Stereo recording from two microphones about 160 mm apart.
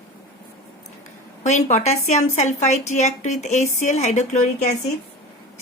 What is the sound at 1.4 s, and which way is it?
A woman's voice, 45° left (ahead or behind).